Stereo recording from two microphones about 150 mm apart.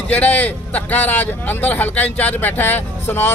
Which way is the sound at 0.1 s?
10° left (ahead or behind).